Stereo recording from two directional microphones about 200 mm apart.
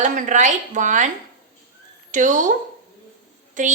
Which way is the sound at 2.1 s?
40° right (ahead or behind).